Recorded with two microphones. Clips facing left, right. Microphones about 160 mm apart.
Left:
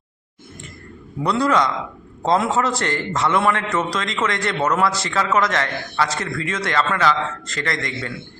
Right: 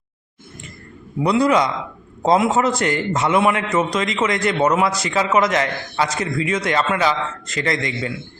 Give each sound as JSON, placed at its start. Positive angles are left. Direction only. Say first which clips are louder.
{"t": 1.2, "sound": "a man's voice", "louder": "right 2 dB", "side_deg": -15}